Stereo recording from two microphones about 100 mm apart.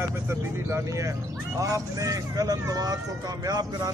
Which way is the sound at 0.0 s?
25° right (ahead or behind).